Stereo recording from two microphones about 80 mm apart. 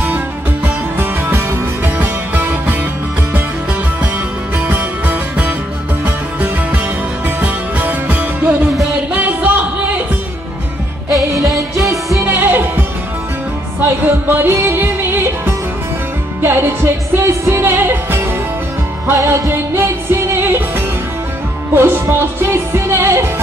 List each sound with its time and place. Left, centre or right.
0.7 s music: right
4.6 s music: right
11.4 s music: right
12.3 s music: right